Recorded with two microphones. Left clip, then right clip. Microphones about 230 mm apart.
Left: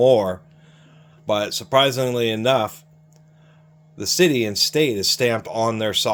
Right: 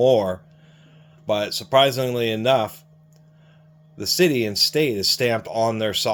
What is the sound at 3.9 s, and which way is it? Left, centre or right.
Speech, centre.